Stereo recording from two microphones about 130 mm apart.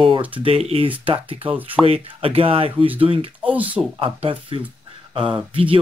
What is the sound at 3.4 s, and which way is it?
Speech, 10° right (ahead or behind).